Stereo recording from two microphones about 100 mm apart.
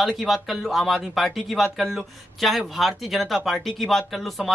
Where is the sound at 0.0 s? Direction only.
Centre (ahead or behind).